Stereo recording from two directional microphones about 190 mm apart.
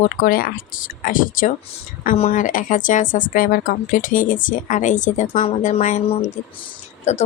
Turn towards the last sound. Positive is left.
turn(degrees=35)  # may be behind; listen again after turning